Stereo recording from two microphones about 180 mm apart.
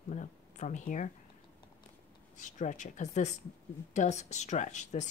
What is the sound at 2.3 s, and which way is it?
Speech, 45° left (ahead or behind).